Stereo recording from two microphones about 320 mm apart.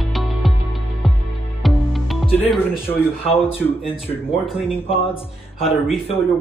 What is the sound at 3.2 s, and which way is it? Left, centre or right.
Speech, centre.